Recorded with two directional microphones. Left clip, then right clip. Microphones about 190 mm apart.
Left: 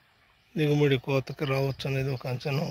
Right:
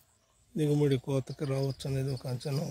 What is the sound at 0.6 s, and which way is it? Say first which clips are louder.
Speech: left 4 dB; 25° right (ahead or behind).